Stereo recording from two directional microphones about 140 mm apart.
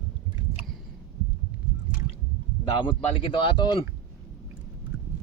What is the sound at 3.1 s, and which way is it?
Speech, 35° left (ahead or behind).